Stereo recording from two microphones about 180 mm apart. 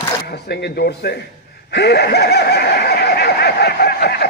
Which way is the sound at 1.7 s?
70° left (ahead or behind).